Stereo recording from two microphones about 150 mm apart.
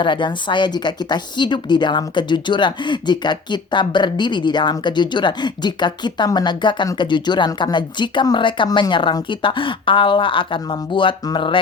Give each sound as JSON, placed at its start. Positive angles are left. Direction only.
{"t": 0.0, "sound": "a woman's voice", "side_deg": 35}